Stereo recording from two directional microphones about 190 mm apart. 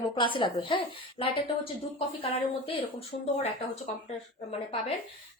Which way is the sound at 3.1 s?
45° left (ahead or behind).